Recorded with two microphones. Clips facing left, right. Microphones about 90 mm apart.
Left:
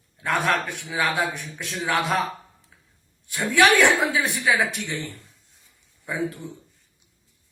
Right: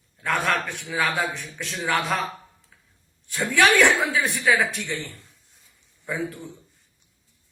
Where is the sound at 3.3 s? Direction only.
15° left (ahead or behind).